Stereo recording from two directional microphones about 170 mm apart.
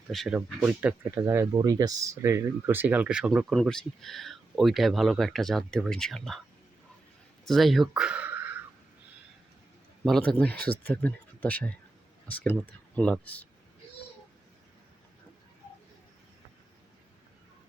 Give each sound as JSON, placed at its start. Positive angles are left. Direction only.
{"t": 0.1, "sound": "speech", "side_deg": 0}
{"t": 0.3, "sound": "speech", "side_deg": -10}
{"t": 7.4, "sound": "speech", "side_deg": 0}
{"t": 10.0, "sound": "speech", "side_deg": 5}